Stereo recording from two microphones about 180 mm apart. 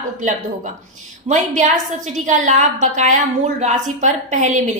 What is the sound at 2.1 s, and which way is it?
A woman's voice, 45° right (ahead or behind).